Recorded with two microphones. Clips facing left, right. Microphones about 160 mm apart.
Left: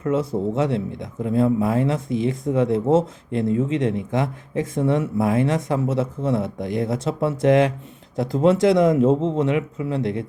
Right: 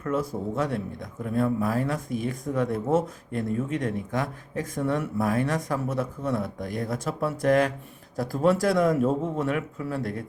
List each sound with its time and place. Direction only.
0.0 s speech: 25° left (ahead or behind)